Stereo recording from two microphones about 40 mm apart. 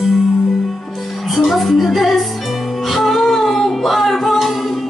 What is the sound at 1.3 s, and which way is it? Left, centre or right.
Music, centre.